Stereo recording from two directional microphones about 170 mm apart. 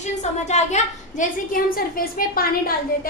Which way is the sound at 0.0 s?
45° left (ahead or behind).